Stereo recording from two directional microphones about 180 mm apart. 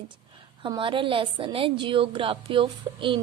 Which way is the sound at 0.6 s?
25° right (ahead or behind).